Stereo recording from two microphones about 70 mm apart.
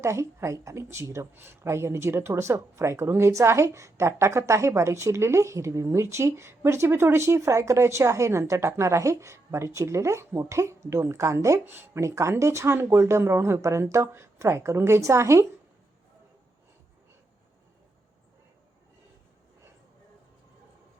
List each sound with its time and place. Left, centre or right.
0.0 s speech: right
11.6 s speech: right
11.9 s speech: right